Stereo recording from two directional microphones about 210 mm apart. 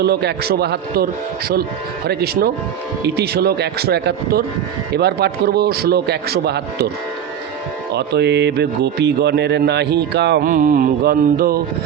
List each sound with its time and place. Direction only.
0.0 s a man's voice: 50° right (ahead or behind)
2.0 s a man's voice: 50° right (ahead or behind)
7.9 s a man's voice: 55° right (ahead or behind)
10.5 s a man's voice: 40° right (ahead or behind)